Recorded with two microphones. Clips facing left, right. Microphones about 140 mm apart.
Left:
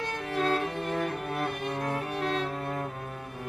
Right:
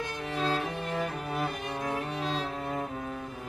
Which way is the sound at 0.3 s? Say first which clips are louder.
Left 3 dB; 55° left (ahead or behind).